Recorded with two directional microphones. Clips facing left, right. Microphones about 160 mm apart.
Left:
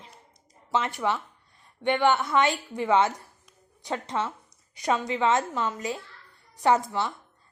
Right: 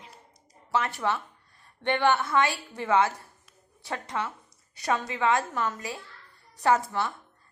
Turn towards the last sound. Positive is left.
turn(degrees=20)  # may be behind; listen again after turning